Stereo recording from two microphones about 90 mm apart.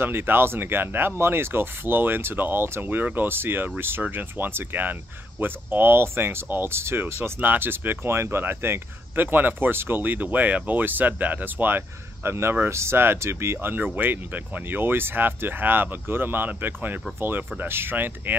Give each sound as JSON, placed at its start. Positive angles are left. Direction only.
{"t": 0.0, "sound": "speech", "side_deg": -25}